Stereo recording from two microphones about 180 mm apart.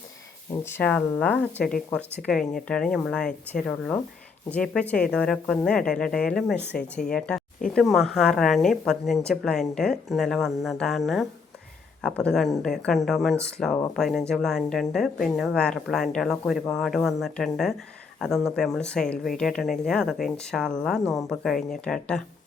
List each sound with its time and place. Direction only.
0.6 s a woman's voice: 10° left (ahead or behind)